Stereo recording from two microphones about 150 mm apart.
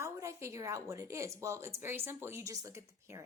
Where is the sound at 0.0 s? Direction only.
20° right (ahead or behind).